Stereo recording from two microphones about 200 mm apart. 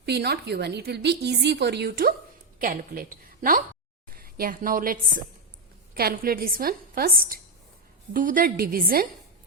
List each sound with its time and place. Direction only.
0.0 s a woman's voice: 55° right (ahead or behind)